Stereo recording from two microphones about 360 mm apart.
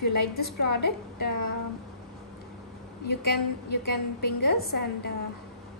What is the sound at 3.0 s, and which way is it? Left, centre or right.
A woman's voice, left.